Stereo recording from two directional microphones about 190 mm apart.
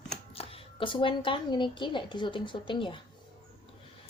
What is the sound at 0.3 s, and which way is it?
Speech, 30° left (ahead or behind).